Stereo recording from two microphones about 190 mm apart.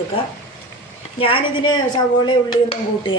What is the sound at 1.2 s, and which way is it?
A woman's voice, 30° left (ahead or behind).